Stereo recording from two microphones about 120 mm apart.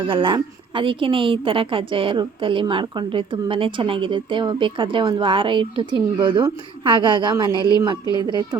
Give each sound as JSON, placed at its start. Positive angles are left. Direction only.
{"t": 0.1, "sound": "a woman's voice", "side_deg": -45}